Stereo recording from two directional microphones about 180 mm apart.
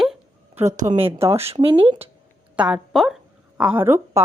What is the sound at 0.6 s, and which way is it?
Speech, 15° right (ahead or behind).